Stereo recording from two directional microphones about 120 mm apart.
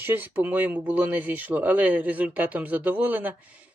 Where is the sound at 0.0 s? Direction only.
15° right (ahead or behind).